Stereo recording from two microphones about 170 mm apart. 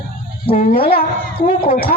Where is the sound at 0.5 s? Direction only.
55° left (ahead or behind).